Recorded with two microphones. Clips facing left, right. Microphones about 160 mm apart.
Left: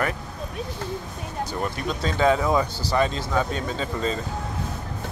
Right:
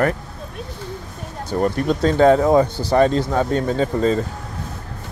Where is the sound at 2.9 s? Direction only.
55° right (ahead or behind).